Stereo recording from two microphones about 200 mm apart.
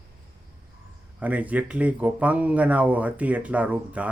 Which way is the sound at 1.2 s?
5° right (ahead or behind).